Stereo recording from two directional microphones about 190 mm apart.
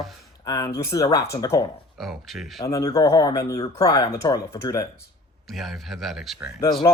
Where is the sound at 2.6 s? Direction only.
20° left (ahead or behind).